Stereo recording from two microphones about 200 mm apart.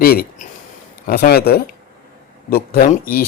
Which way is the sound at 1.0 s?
50° left (ahead or behind).